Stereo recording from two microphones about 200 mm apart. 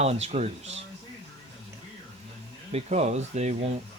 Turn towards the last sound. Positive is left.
turn(degrees=-35)  # may be behind; listen again after turning